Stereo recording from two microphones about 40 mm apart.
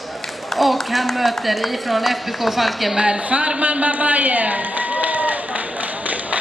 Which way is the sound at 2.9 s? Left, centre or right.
Centre.